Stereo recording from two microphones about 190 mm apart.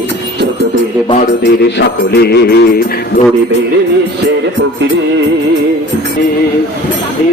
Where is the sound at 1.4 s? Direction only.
65° left (ahead or behind).